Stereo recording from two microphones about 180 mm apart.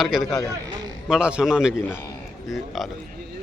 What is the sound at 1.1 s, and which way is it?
Speech, 5° right (ahead or behind).